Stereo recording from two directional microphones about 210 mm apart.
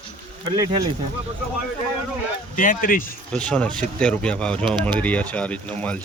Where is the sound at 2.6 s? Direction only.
40° left (ahead or behind).